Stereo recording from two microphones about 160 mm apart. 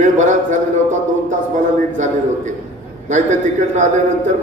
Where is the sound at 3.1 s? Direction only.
50° right (ahead or behind).